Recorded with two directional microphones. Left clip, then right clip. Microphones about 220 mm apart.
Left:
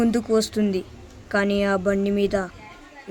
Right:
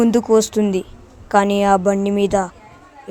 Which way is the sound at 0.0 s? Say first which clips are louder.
Right 7 dB; 20° right (ahead or behind).